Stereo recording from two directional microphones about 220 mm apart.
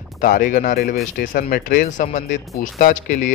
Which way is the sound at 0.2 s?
40° left (ahead or behind).